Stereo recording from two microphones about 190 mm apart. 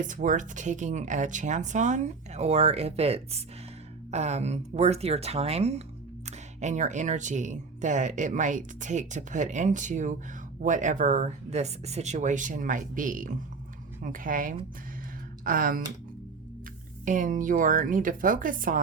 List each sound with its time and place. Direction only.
0.0 s a woman's voice: 45° right (ahead or behind)
17.1 s a woman's voice: 45° right (ahead or behind)